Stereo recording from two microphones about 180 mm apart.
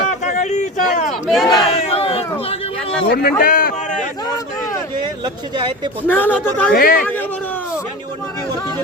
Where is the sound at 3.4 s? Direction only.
55° left (ahead or behind).